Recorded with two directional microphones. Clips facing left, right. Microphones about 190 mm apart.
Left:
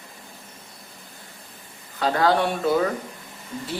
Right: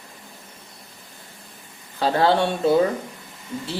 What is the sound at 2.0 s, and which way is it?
Speech, 30° right (ahead or behind).